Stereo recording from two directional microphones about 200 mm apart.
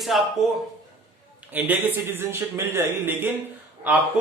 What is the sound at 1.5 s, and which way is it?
Speech, 10° right (ahead or behind).